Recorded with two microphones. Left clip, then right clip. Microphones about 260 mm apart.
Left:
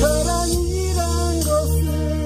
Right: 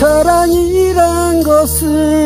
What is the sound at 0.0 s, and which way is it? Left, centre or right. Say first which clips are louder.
Music: right 11 dB; right.